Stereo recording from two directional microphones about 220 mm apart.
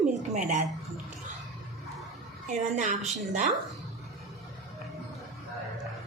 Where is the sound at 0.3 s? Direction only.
35° right (ahead or behind).